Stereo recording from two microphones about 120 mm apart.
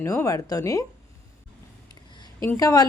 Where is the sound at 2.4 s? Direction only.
25° left (ahead or behind).